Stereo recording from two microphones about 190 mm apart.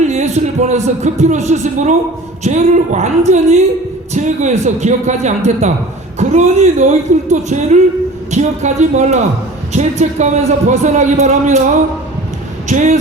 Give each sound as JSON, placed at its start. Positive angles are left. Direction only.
{"t": 0.0, "sound": "a man's voice", "side_deg": -35}